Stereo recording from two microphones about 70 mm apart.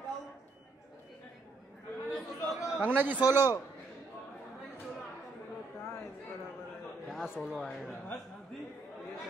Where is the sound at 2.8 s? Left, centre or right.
Right.